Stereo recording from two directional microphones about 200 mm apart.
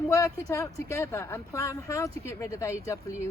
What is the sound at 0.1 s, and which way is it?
Speech, 15° left (ahead or behind).